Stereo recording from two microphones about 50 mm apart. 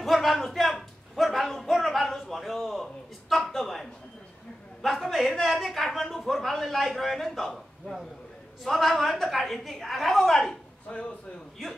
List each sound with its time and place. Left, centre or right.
0.0 s a sound: centre
4.8 s a man's voice: centre
10.9 s a man's voice: centre